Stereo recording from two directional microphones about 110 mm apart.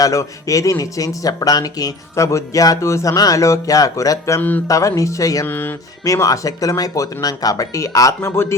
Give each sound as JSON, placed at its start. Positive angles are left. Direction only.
{"t": 0.0, "sound": "speech", "side_deg": 30}
{"t": 4.4, "sound": "speech", "side_deg": 15}
{"t": 4.7, "sound": "speech", "side_deg": 30}
{"t": 5.5, "sound": "speech", "side_deg": 20}
{"t": 6.1, "sound": "speech", "side_deg": 30}